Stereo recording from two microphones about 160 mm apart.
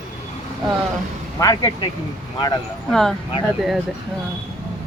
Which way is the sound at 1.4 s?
25° left (ahead or behind).